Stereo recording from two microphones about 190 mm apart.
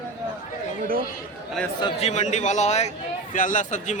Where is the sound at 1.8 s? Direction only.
35° left (ahead or behind).